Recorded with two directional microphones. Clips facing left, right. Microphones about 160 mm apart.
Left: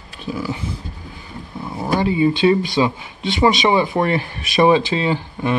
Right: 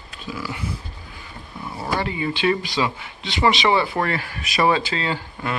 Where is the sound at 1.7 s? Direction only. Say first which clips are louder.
Left 7 dB; 20° left (ahead or behind).